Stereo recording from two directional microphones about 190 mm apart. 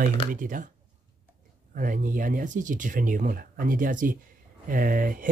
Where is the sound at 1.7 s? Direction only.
45° right (ahead or behind).